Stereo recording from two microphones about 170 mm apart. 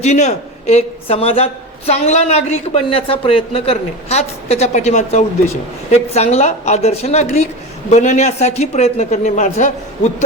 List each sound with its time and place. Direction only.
0.0 s a man's voice: 40° left (ahead or behind)